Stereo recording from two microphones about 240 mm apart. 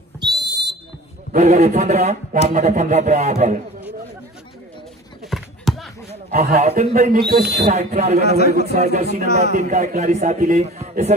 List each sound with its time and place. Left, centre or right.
0.2 s whistle: centre
1.3 s speech: right
5.3 s a sound: centre
6.3 s speech: right
7.7 s speech: right